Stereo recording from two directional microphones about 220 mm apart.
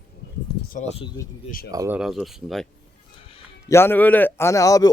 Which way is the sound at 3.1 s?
25° left (ahead or behind).